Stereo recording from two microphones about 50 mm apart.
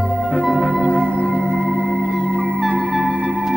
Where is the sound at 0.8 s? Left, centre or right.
Right.